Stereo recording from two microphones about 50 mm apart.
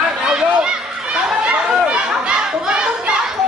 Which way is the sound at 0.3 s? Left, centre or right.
Centre.